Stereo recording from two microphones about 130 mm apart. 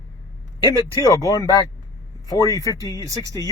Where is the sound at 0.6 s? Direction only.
35° left (ahead or behind).